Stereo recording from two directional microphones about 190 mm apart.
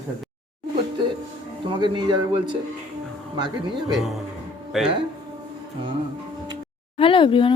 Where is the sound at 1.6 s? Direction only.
25° right (ahead or behind).